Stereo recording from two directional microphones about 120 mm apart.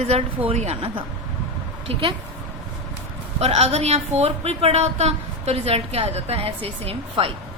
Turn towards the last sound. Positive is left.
turn(degrees=-55)  # may be behind; listen again after turning